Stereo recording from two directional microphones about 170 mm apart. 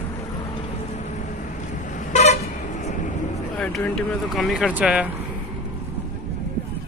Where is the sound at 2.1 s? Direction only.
40° left (ahead or behind).